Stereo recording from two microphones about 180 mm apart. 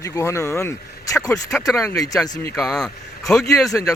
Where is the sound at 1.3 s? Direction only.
5° left (ahead or behind).